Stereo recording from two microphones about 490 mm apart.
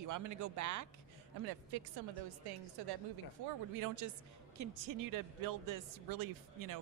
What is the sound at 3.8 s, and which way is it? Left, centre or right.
Speech, right.